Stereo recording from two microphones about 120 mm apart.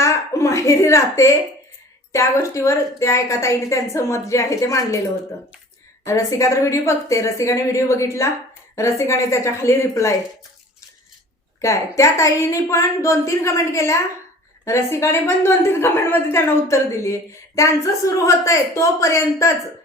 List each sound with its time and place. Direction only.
0.0 s a sound: 25° left (ahead or behind)
2.1 s a woman's voice: 25° left (ahead or behind)
6.1 s a woman's voice: 25° left (ahead or behind)
11.6 s a woman's voice: 25° left (ahead or behind)